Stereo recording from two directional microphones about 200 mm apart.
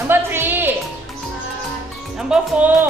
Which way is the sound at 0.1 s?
10° right (ahead or behind).